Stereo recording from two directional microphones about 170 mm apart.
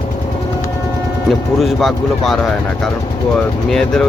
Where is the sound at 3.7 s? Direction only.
5° left (ahead or behind).